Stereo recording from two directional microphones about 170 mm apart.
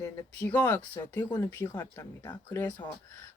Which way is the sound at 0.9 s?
20° left (ahead or behind).